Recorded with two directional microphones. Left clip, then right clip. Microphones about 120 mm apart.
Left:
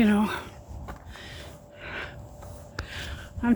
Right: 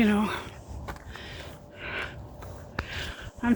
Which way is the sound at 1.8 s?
30° left (ahead or behind).